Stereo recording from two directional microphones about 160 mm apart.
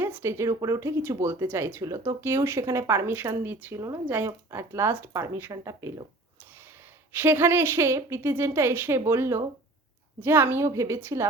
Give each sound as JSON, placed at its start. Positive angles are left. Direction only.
{"t": 0.0, "sound": "speech", "side_deg": -15}
{"t": 7.1, "sound": "speech", "side_deg": -15}